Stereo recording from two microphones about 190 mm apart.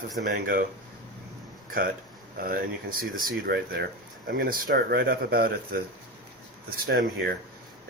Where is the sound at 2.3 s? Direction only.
50° right (ahead or behind).